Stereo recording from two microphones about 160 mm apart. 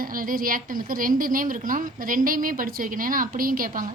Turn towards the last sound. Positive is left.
turn(degrees=-60)  # may be behind; listen again after turning